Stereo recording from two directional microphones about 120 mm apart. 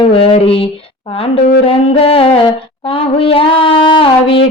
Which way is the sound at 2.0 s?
50° left (ahead or behind).